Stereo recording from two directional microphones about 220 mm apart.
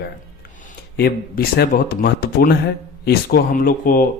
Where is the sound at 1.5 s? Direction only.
45° left (ahead or behind).